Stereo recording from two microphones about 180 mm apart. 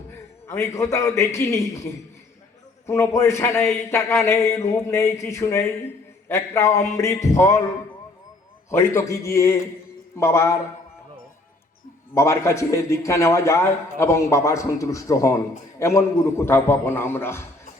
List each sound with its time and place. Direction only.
0.4 s a man's voice: 15° left (ahead or behind)
8.9 s a man's voice: 15° left (ahead or behind)
12.1 s a man's voice: 15° left (ahead or behind)